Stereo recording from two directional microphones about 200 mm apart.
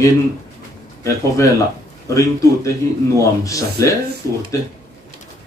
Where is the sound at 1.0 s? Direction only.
15° left (ahead or behind).